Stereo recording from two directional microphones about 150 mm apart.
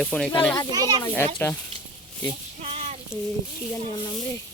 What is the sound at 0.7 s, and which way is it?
Speech, 25° right (ahead or behind).